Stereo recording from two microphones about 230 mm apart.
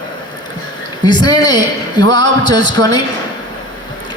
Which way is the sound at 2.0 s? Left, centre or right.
Right.